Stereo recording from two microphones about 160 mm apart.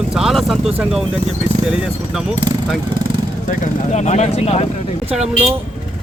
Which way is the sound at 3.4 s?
45° left (ahead or behind).